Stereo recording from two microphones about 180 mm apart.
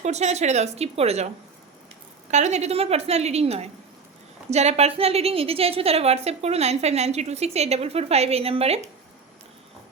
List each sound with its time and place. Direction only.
0.0 s a woman's voice: 40° right (ahead or behind)
2.3 s a woman's voice: 40° right (ahead or behind)